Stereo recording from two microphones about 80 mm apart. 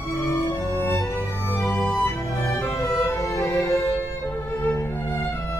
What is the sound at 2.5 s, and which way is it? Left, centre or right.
Music, left.